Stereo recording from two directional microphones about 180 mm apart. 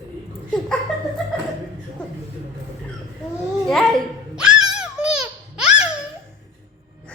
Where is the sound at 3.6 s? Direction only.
Centre (ahead or behind).